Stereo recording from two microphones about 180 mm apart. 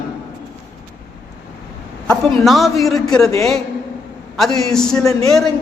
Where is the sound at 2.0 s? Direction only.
5° left (ahead or behind).